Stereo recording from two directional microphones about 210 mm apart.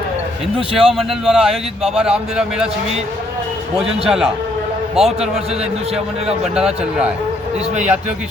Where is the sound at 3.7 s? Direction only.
Centre (ahead or behind).